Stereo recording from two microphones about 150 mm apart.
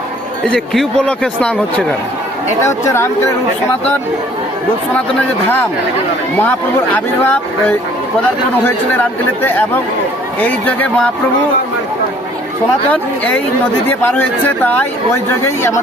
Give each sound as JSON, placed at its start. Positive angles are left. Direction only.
{"t": 0.4, "sound": "speech", "side_deg": 5}
{"t": 2.6, "sound": "speech", "side_deg": 20}
{"t": 6.3, "sound": "speech", "side_deg": 10}
{"t": 9.4, "sound": "speech", "side_deg": 15}
{"t": 14.0, "sound": "speech", "side_deg": 15}